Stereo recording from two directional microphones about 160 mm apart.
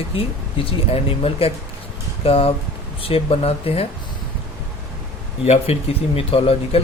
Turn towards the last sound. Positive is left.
turn(degrees=35)  # may be behind; listen again after turning